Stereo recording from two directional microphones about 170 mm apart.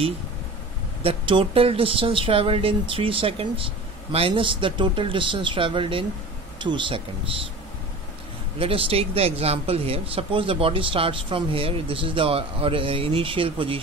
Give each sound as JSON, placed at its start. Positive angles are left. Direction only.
{"t": 1.0, "sound": "speech", "side_deg": -30}
{"t": 8.5, "sound": "speech", "side_deg": -35}